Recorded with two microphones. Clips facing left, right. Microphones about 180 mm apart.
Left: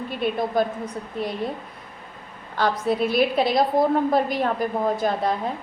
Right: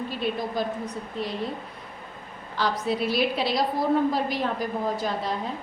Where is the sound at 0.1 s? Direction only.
55° left (ahead or behind).